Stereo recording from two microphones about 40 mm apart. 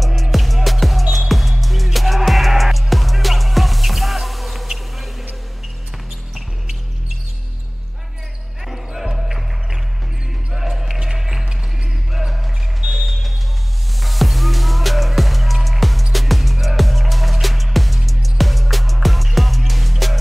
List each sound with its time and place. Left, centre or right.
0.0 s music: centre
6.3 s music: centre
8.6 s basketball bounce: centre
10.5 s basketball bounce: centre
12.8 s a sound: right
13.9 s music: centre